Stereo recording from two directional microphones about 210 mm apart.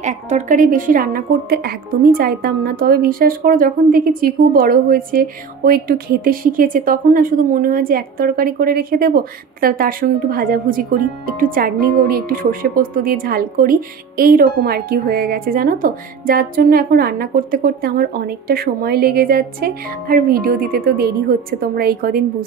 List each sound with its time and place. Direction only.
0.0 s a woman's voice: 35° right (ahead or behind)